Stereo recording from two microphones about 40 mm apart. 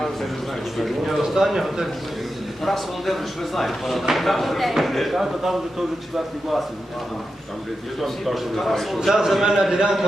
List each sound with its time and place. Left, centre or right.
0.8 s speech: centre
8.0 s speech: centre
9.0 s speech: centre